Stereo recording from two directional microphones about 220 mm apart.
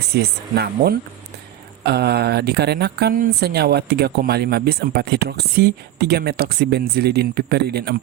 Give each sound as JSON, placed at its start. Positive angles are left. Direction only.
{"t": 0.2, "sound": "speech", "side_deg": -45}